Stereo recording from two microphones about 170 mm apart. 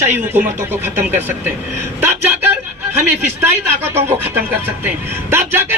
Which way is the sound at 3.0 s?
10° right (ahead or behind).